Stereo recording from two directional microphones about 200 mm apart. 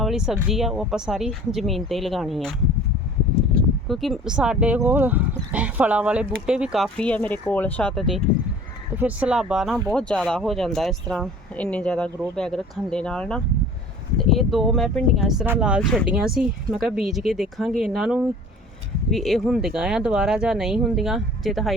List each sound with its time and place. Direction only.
0.0 s speech: 5° right (ahead or behind)
3.8 s speech: centre (ahead or behind)